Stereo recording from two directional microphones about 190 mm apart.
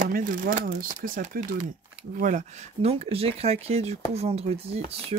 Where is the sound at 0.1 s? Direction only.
45° right (ahead or behind).